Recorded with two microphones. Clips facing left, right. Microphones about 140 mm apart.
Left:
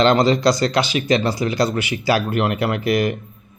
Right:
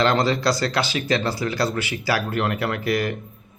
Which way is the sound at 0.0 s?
20° left (ahead or behind).